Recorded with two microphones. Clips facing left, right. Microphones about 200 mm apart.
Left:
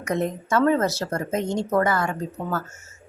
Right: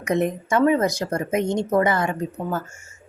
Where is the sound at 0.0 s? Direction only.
20° right (ahead or behind).